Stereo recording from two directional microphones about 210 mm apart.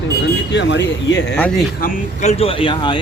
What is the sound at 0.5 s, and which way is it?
Speech, 55° left (ahead or behind).